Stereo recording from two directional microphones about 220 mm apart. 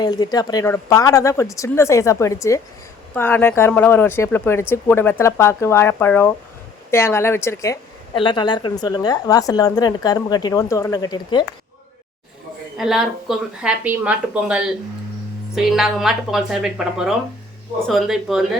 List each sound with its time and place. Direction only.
0.0 s a woman's voice: 20° left (ahead or behind)
12.7 s a woman's voice: centre (ahead or behind)